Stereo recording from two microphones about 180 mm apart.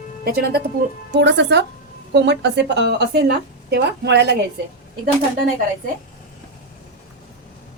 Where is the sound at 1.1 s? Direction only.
75° right (ahead or behind).